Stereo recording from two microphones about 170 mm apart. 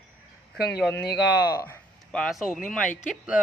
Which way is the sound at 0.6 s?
75° left (ahead or behind).